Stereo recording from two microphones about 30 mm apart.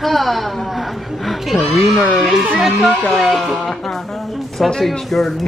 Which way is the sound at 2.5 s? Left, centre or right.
Centre.